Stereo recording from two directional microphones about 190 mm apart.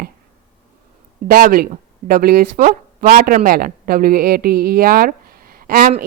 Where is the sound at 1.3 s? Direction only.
50° right (ahead or behind).